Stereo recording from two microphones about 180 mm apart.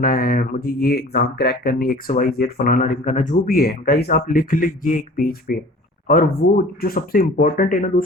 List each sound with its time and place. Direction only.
0.0 s speech: 55° left (ahead or behind)
6.8 s speech: 55° left (ahead or behind)